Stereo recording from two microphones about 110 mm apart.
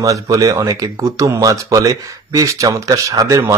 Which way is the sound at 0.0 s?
30° right (ahead or behind).